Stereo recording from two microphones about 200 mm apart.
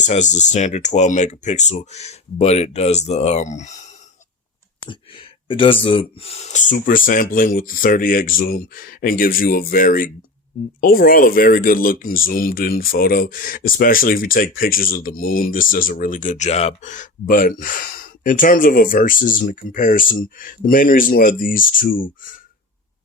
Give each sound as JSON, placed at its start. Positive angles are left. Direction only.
{"t": 0.0, "sound": "speech", "side_deg": 35}
{"t": 4.8, "sound": "speech", "side_deg": 25}